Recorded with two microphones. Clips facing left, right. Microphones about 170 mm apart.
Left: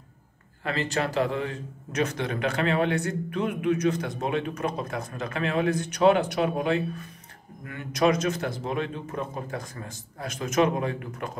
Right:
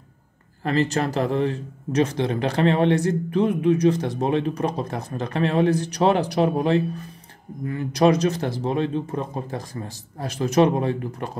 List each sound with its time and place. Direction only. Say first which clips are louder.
0.7 s a man's voice: right 6 dB; 40° right (ahead or behind)